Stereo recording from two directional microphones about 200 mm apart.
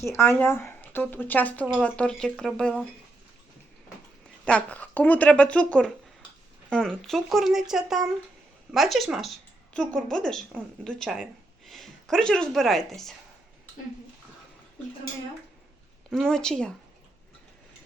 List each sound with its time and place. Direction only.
0.0 s speech: 10° left (ahead or behind)
4.4 s a woman's voice: 5° left (ahead or behind)
16.0 s speech: 5° left (ahead or behind)